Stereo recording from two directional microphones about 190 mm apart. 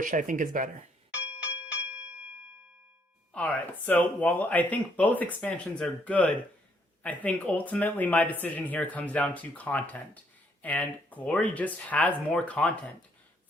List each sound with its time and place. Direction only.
0.0 s speech: 45° right (ahead or behind)
1.8 s bell: 10° right (ahead or behind)
3.3 s speech: 10° left (ahead or behind)